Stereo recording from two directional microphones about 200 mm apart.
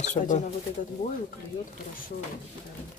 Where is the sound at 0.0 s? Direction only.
35° left (ahead or behind).